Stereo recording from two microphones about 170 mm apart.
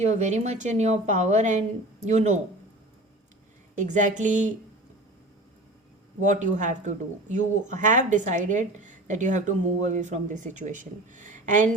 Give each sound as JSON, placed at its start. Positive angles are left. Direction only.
{"t": 0.0, "sound": "speech", "side_deg": -45}
{"t": 3.8, "sound": "speech", "side_deg": -45}
{"t": 6.1, "sound": "speech", "side_deg": -45}